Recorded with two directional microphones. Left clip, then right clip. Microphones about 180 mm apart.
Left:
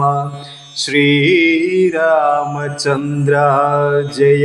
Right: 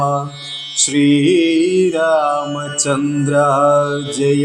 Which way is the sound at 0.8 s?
40° right (ahead or behind).